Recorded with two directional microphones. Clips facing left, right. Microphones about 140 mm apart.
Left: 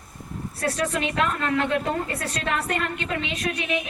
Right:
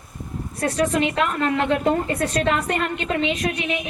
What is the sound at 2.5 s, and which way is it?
A woman's voice, 20° right (ahead or behind).